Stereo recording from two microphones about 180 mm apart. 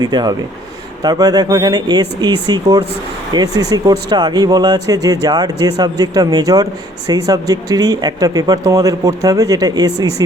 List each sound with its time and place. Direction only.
0.0 s speech: 25° right (ahead or behind)